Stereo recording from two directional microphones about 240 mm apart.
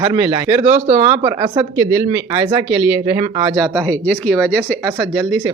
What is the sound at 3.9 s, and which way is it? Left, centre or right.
Speech, centre.